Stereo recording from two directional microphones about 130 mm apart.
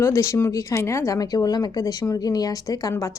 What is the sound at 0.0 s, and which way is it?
Speech, 20° left (ahead or behind).